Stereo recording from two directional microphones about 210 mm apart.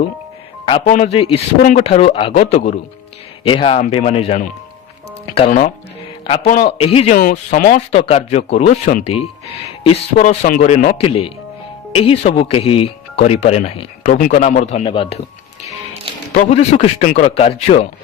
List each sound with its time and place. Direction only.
0.9 s speech: 35° left (ahead or behind)
5.5 s speech: 40° left (ahead or behind)
6.6 s speech: 25° left (ahead or behind)
7.2 s speech: 40° left (ahead or behind)
10.2 s speech: 40° left (ahead or behind)
16.3 s speech: 35° left (ahead or behind)